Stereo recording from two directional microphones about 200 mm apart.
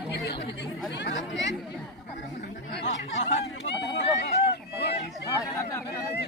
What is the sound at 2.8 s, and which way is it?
Chatter, 65° left (ahead or behind).